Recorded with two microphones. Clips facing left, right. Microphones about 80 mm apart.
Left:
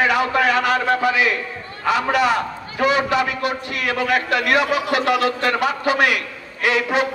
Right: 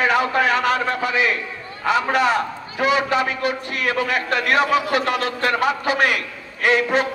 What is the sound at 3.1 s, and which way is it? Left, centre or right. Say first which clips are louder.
A man's voice: even; right.